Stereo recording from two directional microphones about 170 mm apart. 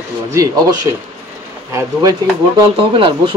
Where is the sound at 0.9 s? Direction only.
20° right (ahead or behind).